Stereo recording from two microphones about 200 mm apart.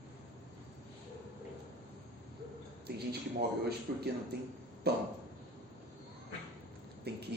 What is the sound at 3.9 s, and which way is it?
Speech, 50° right (ahead or behind).